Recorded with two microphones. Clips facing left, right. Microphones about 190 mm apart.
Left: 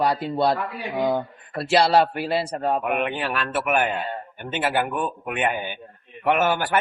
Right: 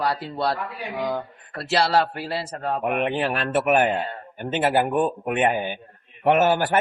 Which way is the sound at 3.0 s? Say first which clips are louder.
Right 2 dB; 35° right (ahead or behind).